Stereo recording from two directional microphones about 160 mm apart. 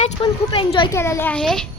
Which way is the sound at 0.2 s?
30° left (ahead or behind).